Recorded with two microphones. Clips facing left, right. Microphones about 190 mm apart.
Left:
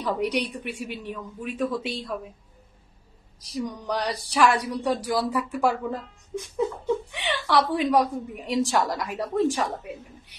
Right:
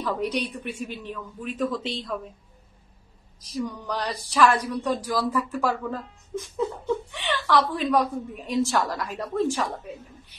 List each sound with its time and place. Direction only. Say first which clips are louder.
0.0 s a woman's voice: left 1 dB; 15° left (ahead or behind)
3.8 s a woman's voice: left 2 dB; 15° left (ahead or behind)